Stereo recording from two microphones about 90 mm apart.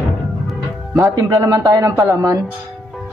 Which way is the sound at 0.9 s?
30° right (ahead or behind).